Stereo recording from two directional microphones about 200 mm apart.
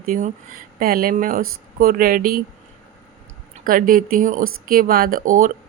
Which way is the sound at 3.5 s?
45° right (ahead or behind).